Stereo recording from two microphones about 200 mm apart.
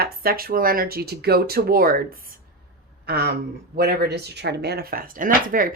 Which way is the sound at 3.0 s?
55° right (ahead or behind).